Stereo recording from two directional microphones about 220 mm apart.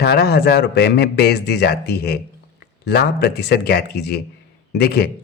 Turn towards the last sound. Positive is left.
turn(degrees=45)  # may be behind; listen again after turning